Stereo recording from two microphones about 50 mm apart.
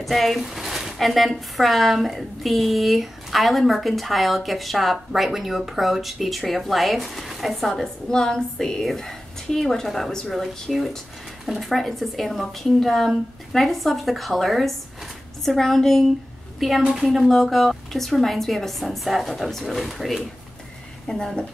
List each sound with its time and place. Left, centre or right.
0.0 s speech: centre
8.1 s a woman's voice: centre
21.1 s a woman's voice: centre